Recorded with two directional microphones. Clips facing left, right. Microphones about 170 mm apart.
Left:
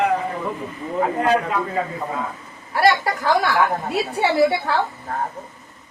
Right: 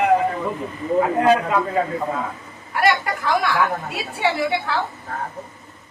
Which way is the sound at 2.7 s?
35° left (ahead or behind).